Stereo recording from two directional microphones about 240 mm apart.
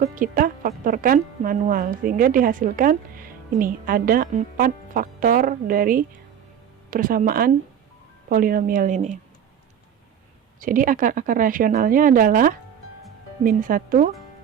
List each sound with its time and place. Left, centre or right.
0.0 s a woman's voice: right
10.6 s a woman's voice: right